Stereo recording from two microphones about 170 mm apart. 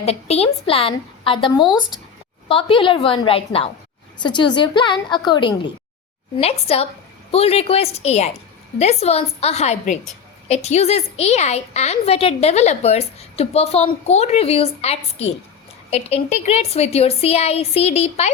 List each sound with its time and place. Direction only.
0.0 s a woman's voice: 35° left (ahead or behind)